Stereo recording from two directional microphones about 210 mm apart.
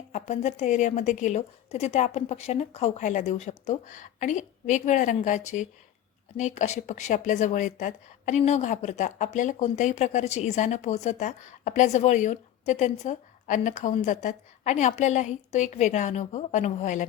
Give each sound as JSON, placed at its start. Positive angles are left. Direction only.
{"t": 0.1, "sound": "speech", "side_deg": 35}